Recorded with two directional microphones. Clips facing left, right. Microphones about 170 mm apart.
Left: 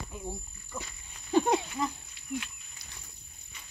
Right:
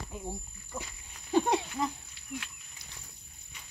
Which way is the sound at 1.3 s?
Centre (ahead or behind).